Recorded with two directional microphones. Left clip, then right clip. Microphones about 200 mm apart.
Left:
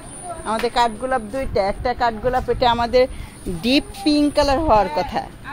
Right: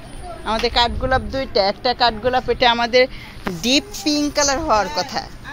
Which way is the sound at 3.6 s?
15° left (ahead or behind).